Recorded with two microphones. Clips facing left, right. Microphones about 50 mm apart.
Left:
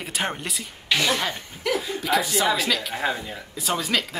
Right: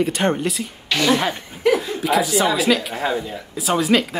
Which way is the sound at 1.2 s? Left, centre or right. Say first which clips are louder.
Right 5 dB; centre.